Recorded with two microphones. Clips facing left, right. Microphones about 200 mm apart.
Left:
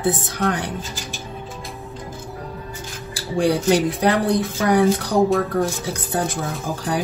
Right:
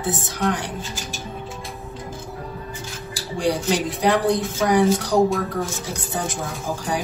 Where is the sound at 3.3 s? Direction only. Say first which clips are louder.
Left 4 dB; 60° left (ahead or behind).